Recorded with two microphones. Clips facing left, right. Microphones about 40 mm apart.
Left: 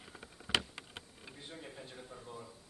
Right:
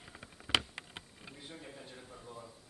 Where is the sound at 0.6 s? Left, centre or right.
Centre.